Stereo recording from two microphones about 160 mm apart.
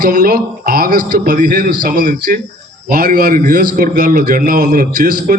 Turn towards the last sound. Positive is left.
turn(degrees=-60)  # may be behind; listen again after turning